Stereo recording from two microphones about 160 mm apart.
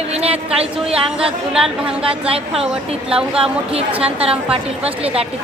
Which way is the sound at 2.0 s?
35° right (ahead or behind).